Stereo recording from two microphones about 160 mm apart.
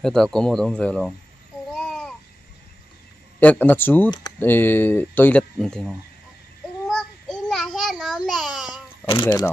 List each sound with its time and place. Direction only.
0.0 s speech: 5° left (ahead or behind)
1.7 s babbling: 5° left (ahead or behind)
3.3 s speech: 10° left (ahead or behind)
6.9 s child singing: 5° left (ahead or behind)
8.3 s babbling: centre (ahead or behind)
9.0 s speech: 30° left (ahead or behind)